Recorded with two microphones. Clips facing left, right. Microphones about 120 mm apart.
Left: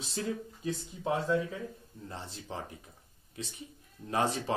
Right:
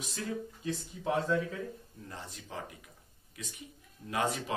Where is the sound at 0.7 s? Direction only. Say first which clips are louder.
Left 2 dB; 20° left (ahead or behind).